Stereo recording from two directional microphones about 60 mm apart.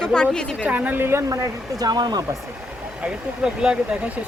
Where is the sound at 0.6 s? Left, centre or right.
Right.